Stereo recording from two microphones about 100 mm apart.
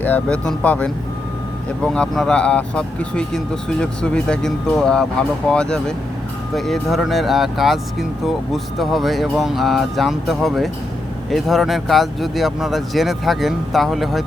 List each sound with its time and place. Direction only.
0.0 s speech: 15° left (ahead or behind); by 14.3 s centre (ahead or behind)